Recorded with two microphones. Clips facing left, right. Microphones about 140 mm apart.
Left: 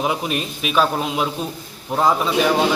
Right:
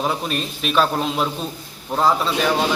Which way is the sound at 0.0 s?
10° left (ahead or behind).